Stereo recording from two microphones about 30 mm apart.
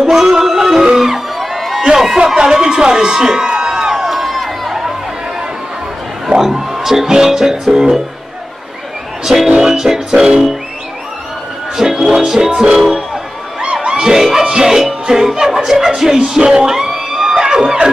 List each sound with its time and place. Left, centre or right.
0.1 s yodeling: centre
0.9 s music: centre
1.6 s a sound: centre
2.1 s a sound: right
6.2 s a sound: centre
6.7 s speech: centre
9.2 s speech: centre
10.1 s speech: right
11.7 s speech: centre
12.3 s music: centre
13.8 s speech: right
16.6 s a sound: centre
17.3 s crowd: right